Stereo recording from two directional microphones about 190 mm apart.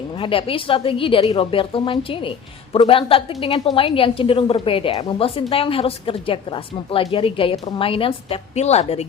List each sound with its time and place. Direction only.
0.2 s a woman's voice: 30° left (ahead or behind)